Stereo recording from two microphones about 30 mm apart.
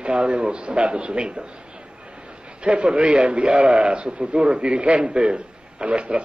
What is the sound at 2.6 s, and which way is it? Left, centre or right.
A man's voice, right.